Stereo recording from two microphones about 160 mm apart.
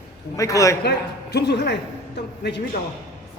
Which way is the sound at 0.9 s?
90° left.